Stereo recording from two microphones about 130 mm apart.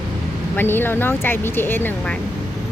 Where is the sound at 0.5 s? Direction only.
15° left (ahead or behind).